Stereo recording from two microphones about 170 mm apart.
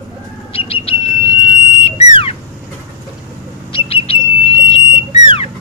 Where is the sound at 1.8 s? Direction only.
35° left (ahead or behind).